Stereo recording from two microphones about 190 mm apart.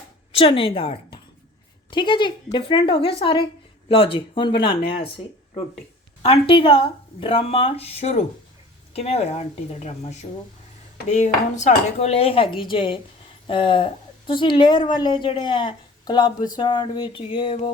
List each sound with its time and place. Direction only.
0.3 s a woman's voice: 30° left (ahead or behind)
6.2 s a woman's voice: 30° left (ahead or behind)